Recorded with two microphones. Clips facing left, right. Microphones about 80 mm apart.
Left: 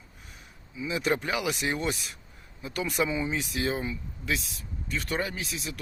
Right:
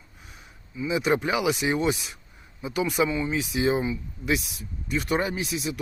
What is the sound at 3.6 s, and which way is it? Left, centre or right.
Speech, centre.